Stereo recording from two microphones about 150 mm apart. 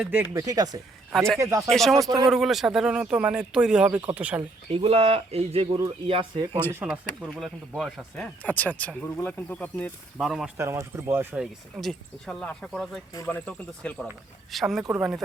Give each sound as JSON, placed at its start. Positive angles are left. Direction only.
{"t": 0.0, "sound": "speech", "side_deg": -10}
{"t": 0.3, "sound": "speech", "side_deg": -25}
{"t": 1.7, "sound": "speech", "side_deg": 0}
{"t": 2.0, "sound": "speech", "side_deg": -25}
{"t": 2.3, "sound": "speech", "side_deg": 0}
{"t": 4.7, "sound": "speech", "side_deg": -40}
{"t": 6.7, "sound": "speech", "side_deg": -10}
{"t": 10.6, "sound": "speech", "side_deg": -20}
{"t": 11.8, "sound": "speech", "side_deg": 0}